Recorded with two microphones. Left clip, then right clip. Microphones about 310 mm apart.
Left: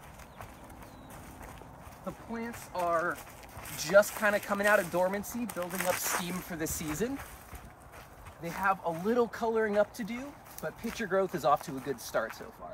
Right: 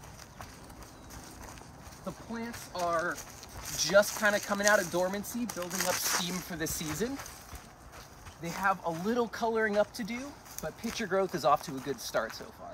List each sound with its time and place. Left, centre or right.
2.3 s speech: centre
8.4 s speech: centre